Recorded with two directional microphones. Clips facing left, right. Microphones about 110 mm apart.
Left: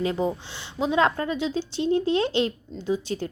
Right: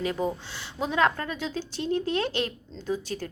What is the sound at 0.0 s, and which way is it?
Speech, 25° left (ahead or behind).